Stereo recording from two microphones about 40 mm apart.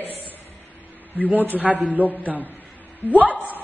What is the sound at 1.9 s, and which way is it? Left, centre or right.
A woman's voice, right.